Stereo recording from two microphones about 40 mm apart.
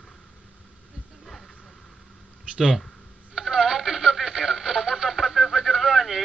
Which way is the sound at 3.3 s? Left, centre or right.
Centre.